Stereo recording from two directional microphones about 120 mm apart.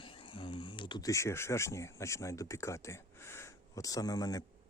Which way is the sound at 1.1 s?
20° left (ahead or behind).